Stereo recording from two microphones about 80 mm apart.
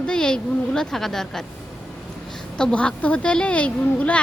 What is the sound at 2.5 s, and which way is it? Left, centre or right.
A woman's voice, centre.